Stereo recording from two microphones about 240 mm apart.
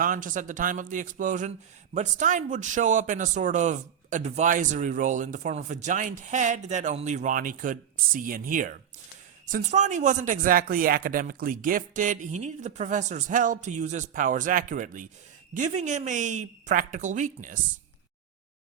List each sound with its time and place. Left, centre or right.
0.0 s a man's voice: right